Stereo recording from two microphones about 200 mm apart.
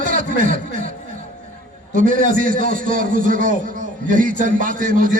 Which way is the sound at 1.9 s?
45° right (ahead or behind).